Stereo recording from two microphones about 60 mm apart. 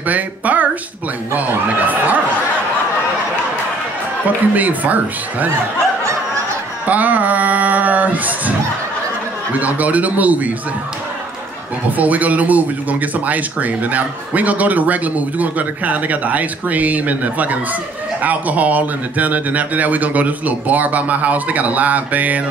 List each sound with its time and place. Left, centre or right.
0.0 s speech: right
4.6 s speech: right
6.9 s a sound: right
9.5 s speech: right
12.0 s speech: right